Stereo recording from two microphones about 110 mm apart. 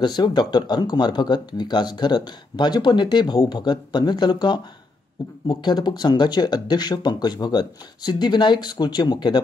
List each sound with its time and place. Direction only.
0.0 s speech: 40° left (ahead or behind)